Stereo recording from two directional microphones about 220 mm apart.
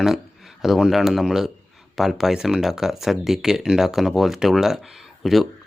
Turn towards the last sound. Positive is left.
turn(degrees=0)  # may be behind; listen again after turning